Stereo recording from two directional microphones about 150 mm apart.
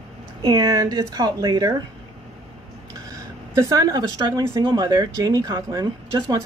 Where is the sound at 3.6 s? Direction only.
20° right (ahead or behind).